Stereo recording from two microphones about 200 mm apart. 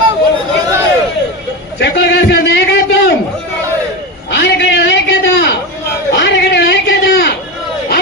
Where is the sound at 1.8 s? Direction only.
55° left (ahead or behind).